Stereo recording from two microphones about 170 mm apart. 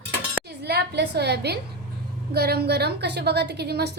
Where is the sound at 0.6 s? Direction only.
75° right (ahead or behind).